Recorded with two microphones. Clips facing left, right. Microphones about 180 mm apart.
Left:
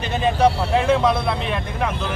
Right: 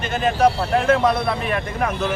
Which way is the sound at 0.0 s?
Centre (ahead or behind).